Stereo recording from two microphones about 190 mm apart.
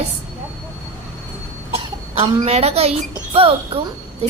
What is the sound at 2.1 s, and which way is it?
A woman's voice, 35° right (ahead or behind).